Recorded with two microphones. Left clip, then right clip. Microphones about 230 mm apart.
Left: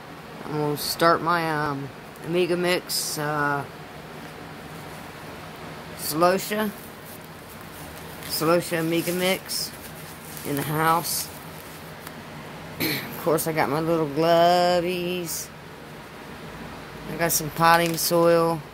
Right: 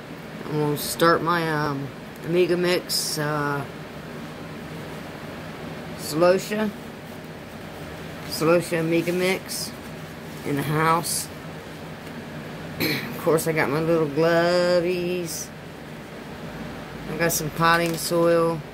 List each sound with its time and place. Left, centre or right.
0.6 s speech: centre
6.0 s speech: left
8.3 s speech: left
10.7 s speech: centre
12.7 s speech: centre
17.2 s speech: left